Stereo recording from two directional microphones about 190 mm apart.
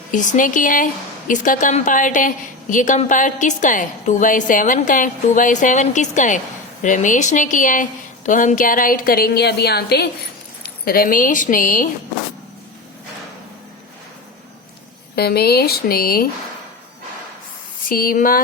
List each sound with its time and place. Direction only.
0.1 s a woman's voice: 45° left (ahead or behind)
15.1 s speech: 55° left (ahead or behind)
17.8 s a woman's voice: 50° left (ahead or behind)